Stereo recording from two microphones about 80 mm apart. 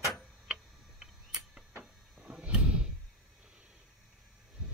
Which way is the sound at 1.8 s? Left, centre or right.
Centre.